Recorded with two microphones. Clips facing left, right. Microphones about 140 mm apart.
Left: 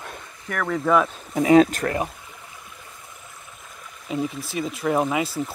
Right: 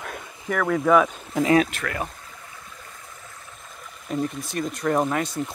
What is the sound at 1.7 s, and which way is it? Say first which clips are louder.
Speech: left 6 dB; 40° left (ahead or behind).